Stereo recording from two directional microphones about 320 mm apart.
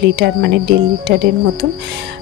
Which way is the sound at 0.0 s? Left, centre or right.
Right.